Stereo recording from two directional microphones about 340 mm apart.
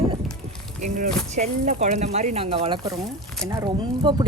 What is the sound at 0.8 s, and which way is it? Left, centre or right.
Speech, right.